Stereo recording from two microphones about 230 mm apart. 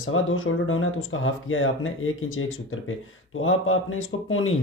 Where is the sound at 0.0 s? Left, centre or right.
Left.